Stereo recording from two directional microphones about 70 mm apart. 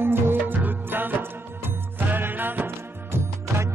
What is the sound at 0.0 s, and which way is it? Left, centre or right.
Music, right.